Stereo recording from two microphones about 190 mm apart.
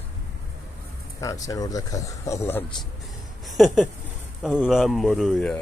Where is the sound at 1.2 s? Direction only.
20° left (ahead or behind).